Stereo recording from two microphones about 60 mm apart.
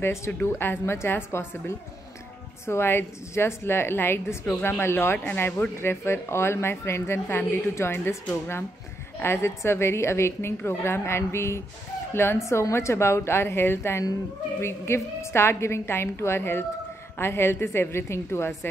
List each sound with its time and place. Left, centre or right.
0.0 s a woman's voice: left
2.6 s a woman's voice: left